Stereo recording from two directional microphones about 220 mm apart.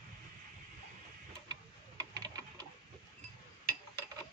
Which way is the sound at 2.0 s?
15° right (ahead or behind).